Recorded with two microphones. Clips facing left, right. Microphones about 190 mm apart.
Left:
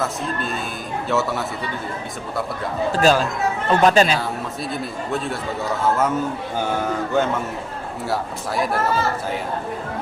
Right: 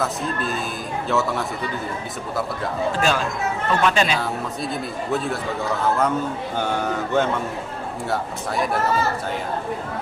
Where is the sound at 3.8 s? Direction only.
40° left (ahead or behind).